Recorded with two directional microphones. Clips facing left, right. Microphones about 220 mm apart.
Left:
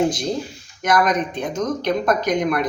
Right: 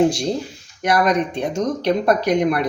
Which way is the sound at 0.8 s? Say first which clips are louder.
Right 1 dB; 30° right (ahead or behind).